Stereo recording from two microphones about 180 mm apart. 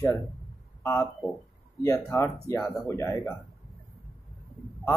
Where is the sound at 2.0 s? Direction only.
15° left (ahead or behind).